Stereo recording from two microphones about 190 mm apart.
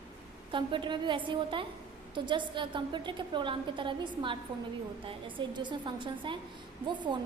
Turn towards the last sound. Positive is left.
turn(degrees=-25)  # may be behind; listen again after turning